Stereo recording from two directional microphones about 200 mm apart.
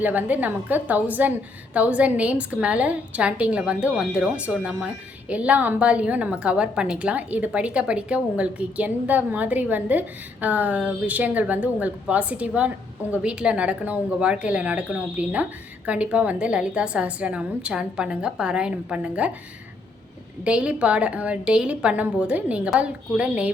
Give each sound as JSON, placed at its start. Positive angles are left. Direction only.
{"t": 0.0, "sound": "a woman's voice", "side_deg": -10}
{"t": 20.4, "sound": "a woman's voice", "side_deg": -5}